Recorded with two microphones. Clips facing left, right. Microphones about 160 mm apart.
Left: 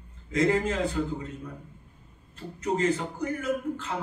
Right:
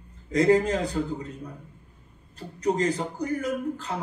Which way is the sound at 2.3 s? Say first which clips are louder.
Right 3 dB; 35° right (ahead or behind).